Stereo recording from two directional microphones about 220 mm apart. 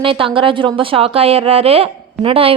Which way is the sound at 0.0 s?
25° right (ahead or behind).